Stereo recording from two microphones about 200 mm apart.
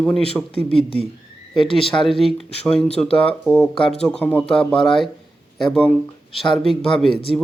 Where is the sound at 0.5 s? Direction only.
25° left (ahead or behind).